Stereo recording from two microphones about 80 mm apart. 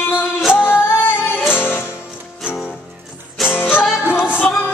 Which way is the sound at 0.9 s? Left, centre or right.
Left.